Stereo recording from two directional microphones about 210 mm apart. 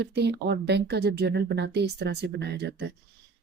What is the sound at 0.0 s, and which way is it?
A woman's voice, 50° right (ahead or behind).